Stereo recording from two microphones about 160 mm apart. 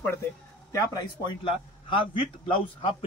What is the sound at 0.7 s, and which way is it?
Speech, 20° left (ahead or behind).